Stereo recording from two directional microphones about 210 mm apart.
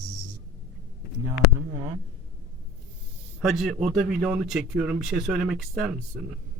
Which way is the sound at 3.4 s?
Centre (ahead or behind).